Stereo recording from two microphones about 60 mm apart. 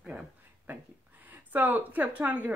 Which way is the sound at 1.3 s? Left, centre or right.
Right.